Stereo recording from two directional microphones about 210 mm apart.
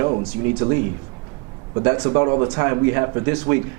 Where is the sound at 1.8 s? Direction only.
20° right (ahead or behind).